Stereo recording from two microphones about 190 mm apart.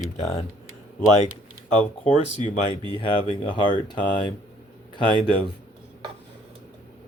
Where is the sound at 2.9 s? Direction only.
25° left (ahead or behind).